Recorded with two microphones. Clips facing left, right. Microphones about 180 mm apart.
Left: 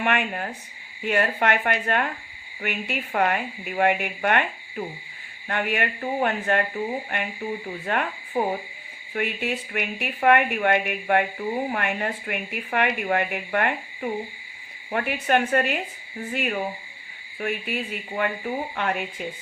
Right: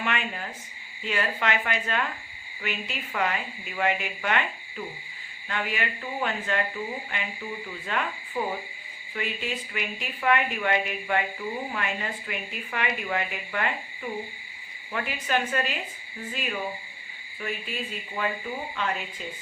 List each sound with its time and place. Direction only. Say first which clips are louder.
0.0 s a woman's voice: left 6 dB; 60° left (ahead or behind)
9.1 s a woman's voice: left 5 dB; 60° left (ahead or behind)